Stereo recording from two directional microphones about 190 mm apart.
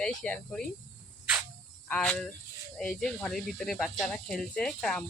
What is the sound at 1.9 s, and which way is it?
Speech, 5° left (ahead or behind).